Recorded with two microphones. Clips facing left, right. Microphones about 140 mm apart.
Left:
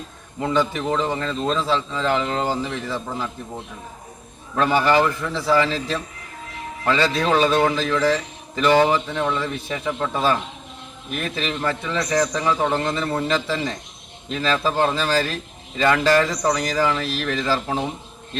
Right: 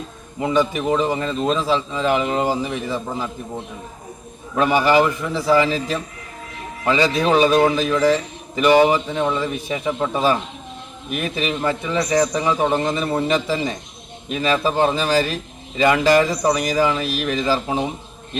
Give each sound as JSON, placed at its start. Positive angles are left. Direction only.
{"t": 0.3, "sound": "a man's voice", "side_deg": -15}